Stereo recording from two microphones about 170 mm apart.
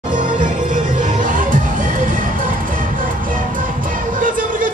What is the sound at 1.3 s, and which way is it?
Music, 50° right (ahead or behind).